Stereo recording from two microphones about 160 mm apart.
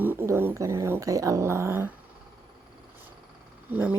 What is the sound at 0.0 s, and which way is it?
Speech, 15° right (ahead or behind).